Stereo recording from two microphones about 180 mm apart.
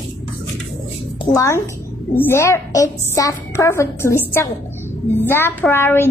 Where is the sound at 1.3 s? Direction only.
25° left (ahead or behind).